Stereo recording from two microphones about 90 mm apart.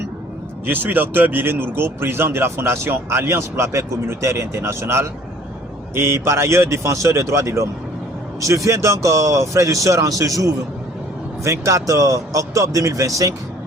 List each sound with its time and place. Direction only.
0.6 s speech: 20° right (ahead or behind); by 13.3 s 40° right (ahead or behind)